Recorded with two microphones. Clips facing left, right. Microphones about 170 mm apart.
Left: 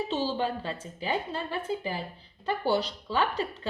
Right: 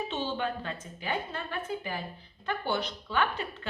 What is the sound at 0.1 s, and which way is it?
Speech, 30° left (ahead or behind).